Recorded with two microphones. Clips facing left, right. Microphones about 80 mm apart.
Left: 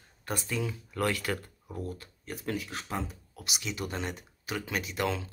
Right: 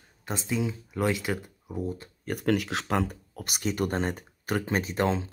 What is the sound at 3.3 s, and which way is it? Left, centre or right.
Speech, right.